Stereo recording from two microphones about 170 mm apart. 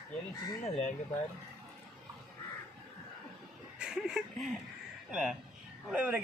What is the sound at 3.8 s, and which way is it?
Speech, 5° right (ahead or behind).